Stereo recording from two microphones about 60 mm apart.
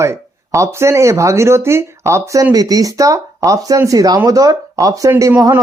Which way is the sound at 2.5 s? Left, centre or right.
Right.